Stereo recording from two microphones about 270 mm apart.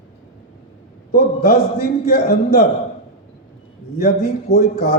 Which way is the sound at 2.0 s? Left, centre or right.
Left.